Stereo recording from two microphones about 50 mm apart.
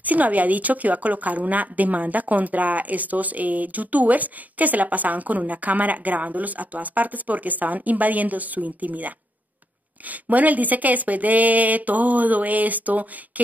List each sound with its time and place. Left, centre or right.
0.0 s a woman's voice: right